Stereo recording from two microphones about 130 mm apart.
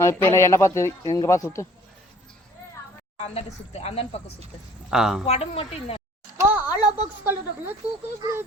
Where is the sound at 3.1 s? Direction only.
55° left (ahead or behind).